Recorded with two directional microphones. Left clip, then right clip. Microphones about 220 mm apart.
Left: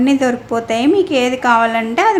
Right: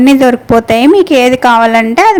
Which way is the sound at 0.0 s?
35° right (ahead or behind).